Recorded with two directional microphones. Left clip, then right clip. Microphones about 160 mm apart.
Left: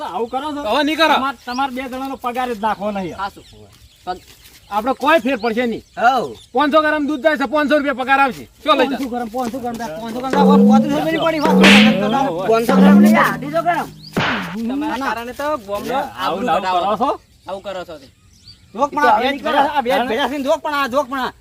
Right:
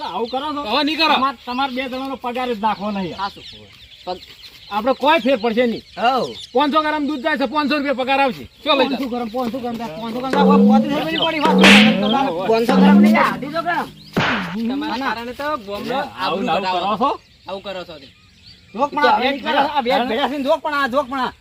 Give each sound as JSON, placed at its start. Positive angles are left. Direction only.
{"t": 0.0, "sound": "bird", "side_deg": 5}
{"t": 0.3, "sound": "speech", "side_deg": 10}
{"t": 4.7, "sound": "speech", "side_deg": 10}
{"t": 13.0, "sound": "speech", "side_deg": 10}
{"t": 14.1, "sound": "music", "side_deg": 0}
{"t": 14.7, "sound": "speech", "side_deg": 15}
{"t": 18.8, "sound": "speech", "side_deg": -5}